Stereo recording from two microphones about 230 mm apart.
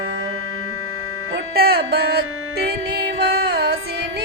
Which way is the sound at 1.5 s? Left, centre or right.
Right.